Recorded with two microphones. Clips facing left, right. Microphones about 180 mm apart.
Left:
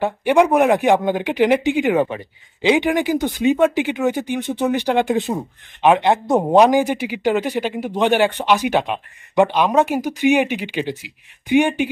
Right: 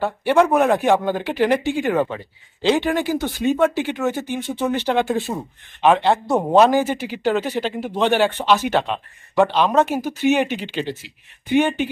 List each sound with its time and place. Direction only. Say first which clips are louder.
0.0 s speech: left 2 dB; 15° left (ahead or behind)